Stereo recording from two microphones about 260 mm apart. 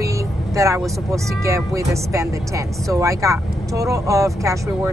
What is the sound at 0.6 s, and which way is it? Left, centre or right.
Speech, centre.